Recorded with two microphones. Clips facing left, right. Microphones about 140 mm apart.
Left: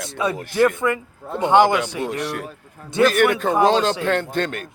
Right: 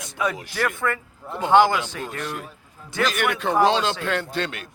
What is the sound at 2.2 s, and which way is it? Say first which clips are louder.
Speech: left 4 dB; 75° left (ahead or behind).